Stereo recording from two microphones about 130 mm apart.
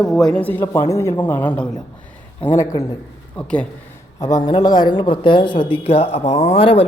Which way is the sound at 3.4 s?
10° left (ahead or behind).